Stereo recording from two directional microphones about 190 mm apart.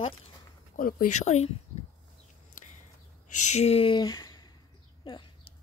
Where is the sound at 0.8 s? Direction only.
45° left (ahead or behind).